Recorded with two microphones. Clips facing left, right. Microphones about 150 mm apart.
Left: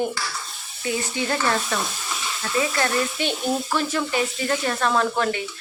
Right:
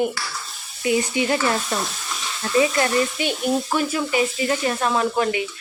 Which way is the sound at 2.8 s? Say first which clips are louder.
Right 3 dB; 15° right (ahead or behind).